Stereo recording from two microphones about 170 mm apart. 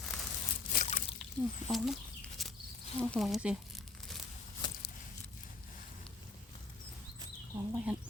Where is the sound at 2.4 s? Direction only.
Centre (ahead or behind).